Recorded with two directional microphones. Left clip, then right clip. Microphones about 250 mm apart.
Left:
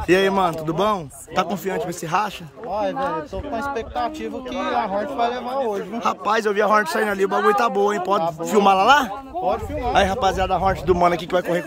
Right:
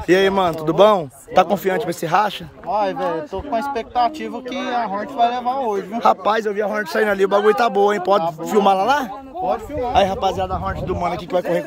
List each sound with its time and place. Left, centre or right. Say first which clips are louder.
0.1 s a man's voice: right 2 dB; centre
10.6 s speech: left 5 dB; left